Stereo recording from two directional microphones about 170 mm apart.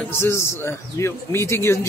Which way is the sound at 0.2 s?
15° left (ahead or behind).